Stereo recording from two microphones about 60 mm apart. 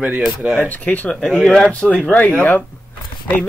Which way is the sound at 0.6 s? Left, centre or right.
Left.